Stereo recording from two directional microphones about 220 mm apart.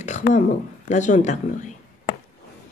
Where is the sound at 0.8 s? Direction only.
35° left (ahead or behind).